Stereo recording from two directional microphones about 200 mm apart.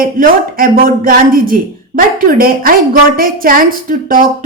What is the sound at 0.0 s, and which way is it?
A woman's voice, 45° right (ahead or behind).